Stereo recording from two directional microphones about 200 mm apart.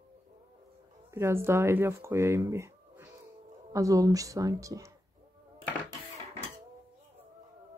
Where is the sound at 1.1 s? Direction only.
15° right (ahead or behind).